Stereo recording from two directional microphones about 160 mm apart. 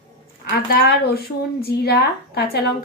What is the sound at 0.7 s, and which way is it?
A woman's voice, 75° left (ahead or behind).